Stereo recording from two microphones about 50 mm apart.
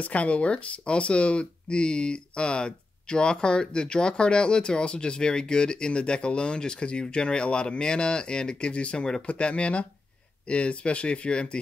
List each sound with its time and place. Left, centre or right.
0.0 s speech: left